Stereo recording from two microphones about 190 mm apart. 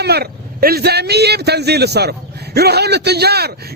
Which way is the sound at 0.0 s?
55° right (ahead or behind).